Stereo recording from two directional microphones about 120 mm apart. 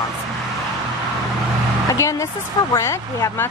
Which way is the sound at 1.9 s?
25° left (ahead or behind).